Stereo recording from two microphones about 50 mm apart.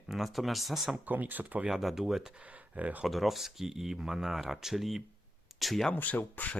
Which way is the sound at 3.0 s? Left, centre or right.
Centre.